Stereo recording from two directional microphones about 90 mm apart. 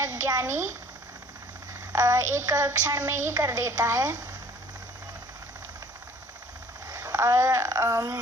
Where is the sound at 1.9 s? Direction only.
40° right (ahead or behind).